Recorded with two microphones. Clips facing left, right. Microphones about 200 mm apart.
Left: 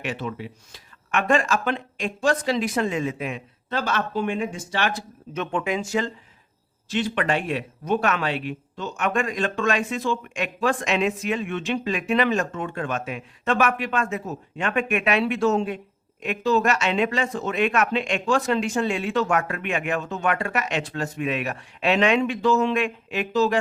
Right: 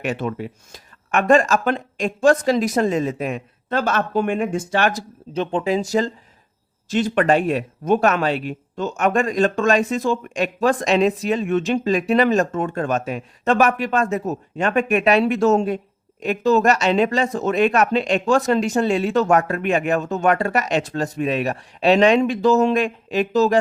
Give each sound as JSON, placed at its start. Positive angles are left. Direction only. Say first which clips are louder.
{"t": 0.0, "sound": "speech", "louder": "right 5 dB", "side_deg": -50}